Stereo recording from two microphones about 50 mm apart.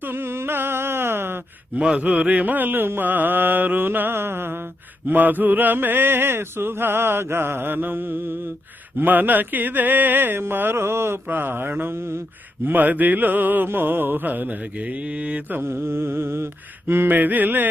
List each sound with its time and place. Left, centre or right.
0.1 s a sound: right
2.0 s mantra: right
5.0 s mantra: right
11.2 s mantra: right
15.5 s mantra: right